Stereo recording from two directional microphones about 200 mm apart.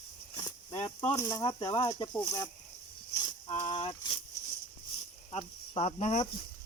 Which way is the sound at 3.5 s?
25° left (ahead or behind).